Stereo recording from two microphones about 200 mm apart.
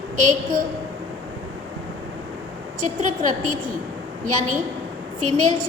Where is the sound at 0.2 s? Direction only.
40° right (ahead or behind).